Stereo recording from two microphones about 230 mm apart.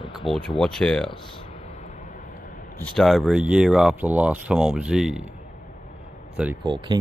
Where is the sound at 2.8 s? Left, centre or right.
Centre.